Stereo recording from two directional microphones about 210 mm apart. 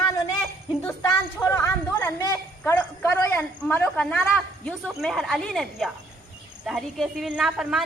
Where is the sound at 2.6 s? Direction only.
10° left (ahead or behind).